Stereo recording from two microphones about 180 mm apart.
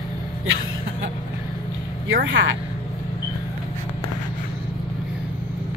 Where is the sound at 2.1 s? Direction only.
90° right.